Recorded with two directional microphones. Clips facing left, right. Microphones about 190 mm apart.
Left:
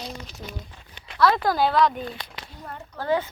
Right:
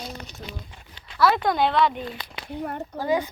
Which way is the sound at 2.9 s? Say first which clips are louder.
Even; 10° right (ahead or behind).